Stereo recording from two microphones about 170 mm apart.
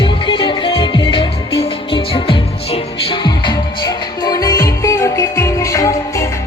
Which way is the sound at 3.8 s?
20° left (ahead or behind).